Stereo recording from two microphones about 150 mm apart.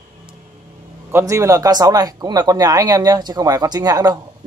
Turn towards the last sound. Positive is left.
turn(degrees=-25)  # may be behind; listen again after turning